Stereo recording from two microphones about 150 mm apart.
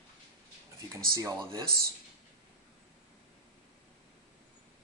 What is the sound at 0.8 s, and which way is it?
Speech, 20° right (ahead or behind).